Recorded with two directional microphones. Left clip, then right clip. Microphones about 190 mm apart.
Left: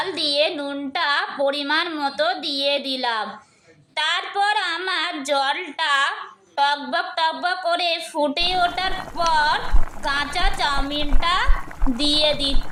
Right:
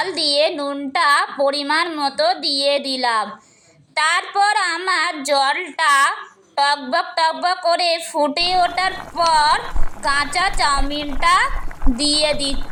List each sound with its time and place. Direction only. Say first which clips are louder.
0.0 s a woman's voice: right 3 dB; 20° right (ahead or behind)